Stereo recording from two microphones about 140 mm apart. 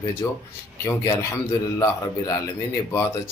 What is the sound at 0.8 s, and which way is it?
Speech, 20° left (ahead or behind).